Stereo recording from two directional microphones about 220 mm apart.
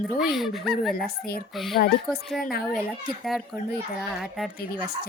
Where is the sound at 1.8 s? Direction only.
40° left (ahead or behind).